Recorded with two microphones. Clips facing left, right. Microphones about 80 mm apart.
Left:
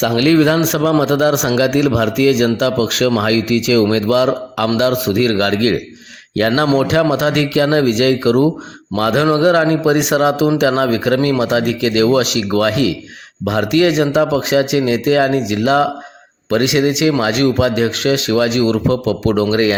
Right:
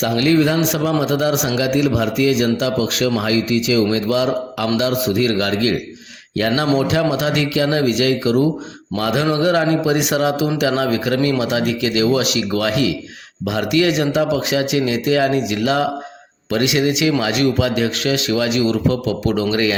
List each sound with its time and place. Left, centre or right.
0.2 s a man's voice: left